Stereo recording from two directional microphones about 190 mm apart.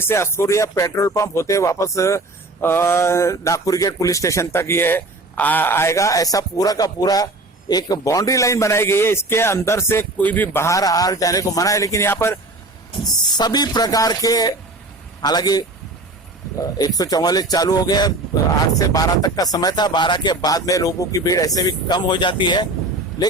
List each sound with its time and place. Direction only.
0.0 s speech: 15° left (ahead or behind)